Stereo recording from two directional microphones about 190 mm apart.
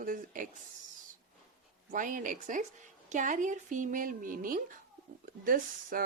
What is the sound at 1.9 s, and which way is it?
Speech, 45° right (ahead or behind).